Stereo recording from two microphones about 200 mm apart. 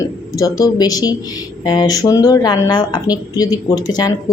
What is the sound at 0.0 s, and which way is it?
Speech, 15° left (ahead or behind).